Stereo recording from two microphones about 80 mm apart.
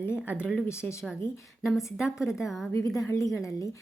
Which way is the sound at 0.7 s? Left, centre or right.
Left.